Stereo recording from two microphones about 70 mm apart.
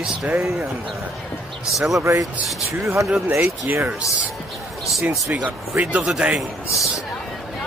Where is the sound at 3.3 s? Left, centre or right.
Right.